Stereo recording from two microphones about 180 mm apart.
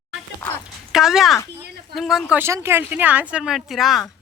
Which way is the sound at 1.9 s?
Centre (ahead or behind).